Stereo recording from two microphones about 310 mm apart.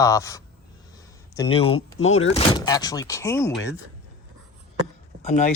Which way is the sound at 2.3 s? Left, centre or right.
Centre.